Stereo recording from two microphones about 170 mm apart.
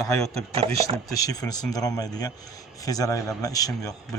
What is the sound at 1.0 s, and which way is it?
Speech, 20° left (ahead or behind).